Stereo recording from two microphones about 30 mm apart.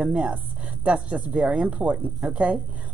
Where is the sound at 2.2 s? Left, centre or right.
Right.